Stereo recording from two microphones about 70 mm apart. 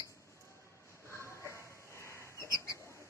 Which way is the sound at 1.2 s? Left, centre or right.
Left.